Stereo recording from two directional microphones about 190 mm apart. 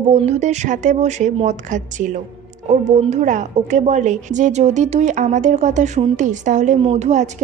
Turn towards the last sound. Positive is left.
turn(degrees=-40)  # may be behind; listen again after turning